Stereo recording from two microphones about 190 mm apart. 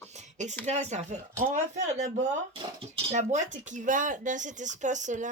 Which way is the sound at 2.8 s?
30° right (ahead or behind).